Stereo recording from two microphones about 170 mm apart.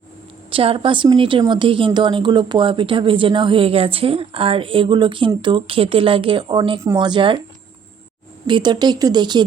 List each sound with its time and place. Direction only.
0.5 s speech: 30° right (ahead or behind)
8.4 s speech: 25° right (ahead or behind)